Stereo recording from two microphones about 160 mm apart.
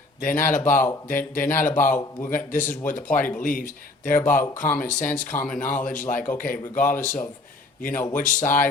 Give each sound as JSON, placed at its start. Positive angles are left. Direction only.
{"t": 0.2, "sound": "speech", "side_deg": 60}
{"t": 0.6, "sound": "speech", "side_deg": 15}
{"t": 1.0, "sound": "speech", "side_deg": 60}